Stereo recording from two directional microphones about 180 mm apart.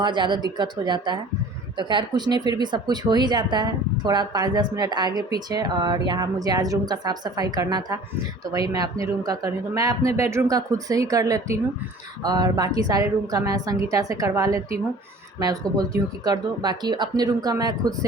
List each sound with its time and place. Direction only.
0.0 s speech: 25° right (ahead or behind)